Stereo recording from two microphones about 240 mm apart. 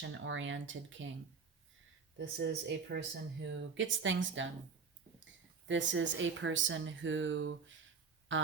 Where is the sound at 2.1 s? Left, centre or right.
Right.